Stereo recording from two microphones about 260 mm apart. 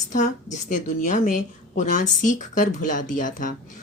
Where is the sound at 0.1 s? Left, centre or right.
Left.